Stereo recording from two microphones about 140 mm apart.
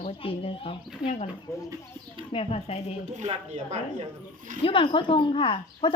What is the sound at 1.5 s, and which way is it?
Speech, 20° left (ahead or behind).